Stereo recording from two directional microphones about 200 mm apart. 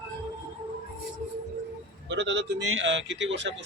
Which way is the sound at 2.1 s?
60° right (ahead or behind).